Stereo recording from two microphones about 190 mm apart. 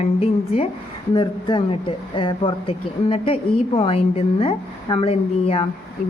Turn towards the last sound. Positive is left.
turn(degrees=30)  # may be behind; listen again after turning